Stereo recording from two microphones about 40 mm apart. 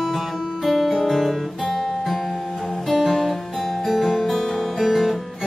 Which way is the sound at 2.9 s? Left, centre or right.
Centre.